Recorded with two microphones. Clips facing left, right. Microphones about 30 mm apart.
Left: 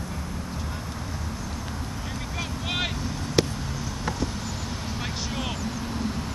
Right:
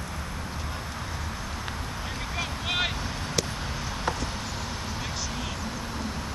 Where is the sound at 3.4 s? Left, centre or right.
Left.